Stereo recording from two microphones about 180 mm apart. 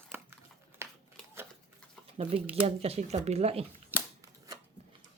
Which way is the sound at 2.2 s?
35° right (ahead or behind).